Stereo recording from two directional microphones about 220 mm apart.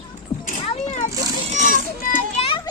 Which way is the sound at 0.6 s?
30° left (ahead or behind).